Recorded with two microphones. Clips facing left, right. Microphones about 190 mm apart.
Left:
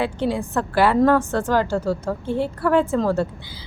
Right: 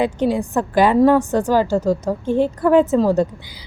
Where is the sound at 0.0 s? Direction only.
15° right (ahead or behind).